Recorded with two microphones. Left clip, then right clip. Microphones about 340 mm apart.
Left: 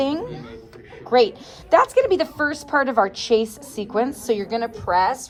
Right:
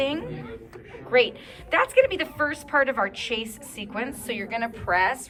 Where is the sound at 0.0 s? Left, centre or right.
Centre.